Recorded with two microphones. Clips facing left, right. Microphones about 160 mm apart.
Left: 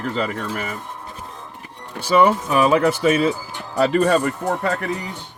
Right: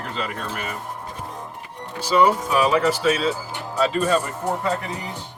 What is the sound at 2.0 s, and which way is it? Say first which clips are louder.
Speech: left 2 dB; 55° left (ahead or behind).